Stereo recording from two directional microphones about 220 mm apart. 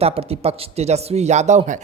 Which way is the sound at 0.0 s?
25° right (ahead or behind).